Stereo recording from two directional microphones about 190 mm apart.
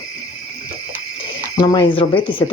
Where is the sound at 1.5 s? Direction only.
20° left (ahead or behind).